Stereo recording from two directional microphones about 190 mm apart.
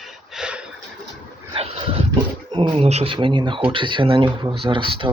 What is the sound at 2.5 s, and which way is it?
Speech, 25° right (ahead or behind).